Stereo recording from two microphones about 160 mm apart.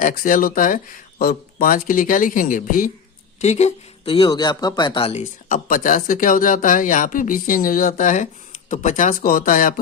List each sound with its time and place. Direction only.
0.0 s speech: 55° left (ahead or behind)
3.4 s speech: 45° left (ahead or behind)
5.5 s speech: 60° left (ahead or behind)